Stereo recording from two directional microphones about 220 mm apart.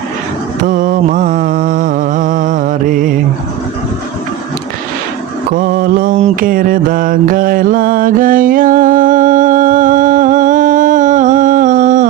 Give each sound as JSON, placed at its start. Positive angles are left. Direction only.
{"t": 0.6, "sound": "mantra", "side_deg": -35}
{"t": 5.5, "sound": "mantra", "side_deg": -40}